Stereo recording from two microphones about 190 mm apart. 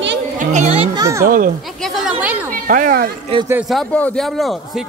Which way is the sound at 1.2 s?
45° right (ahead or behind).